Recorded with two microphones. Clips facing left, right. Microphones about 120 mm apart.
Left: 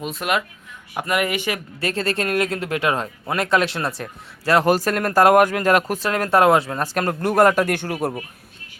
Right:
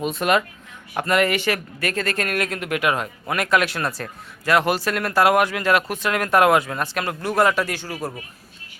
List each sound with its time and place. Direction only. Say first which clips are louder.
0.0 s speech: right 3 dB; centre (ahead or behind)
0.9 s speech: right 2 dB; 15° left (ahead or behind)
4.4 s speech: left 3 dB; 35° left (ahead or behind); by 8.1 s 60° left (ahead or behind)